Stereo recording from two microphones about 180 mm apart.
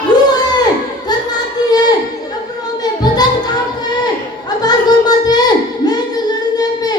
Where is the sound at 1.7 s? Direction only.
20° left (ahead or behind).